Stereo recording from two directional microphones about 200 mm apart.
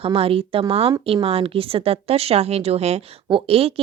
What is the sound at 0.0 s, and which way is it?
A woman's voice, 30° right (ahead or behind).